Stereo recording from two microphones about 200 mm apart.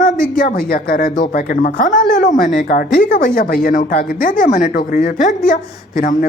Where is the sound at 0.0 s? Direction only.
40° left (ahead or behind).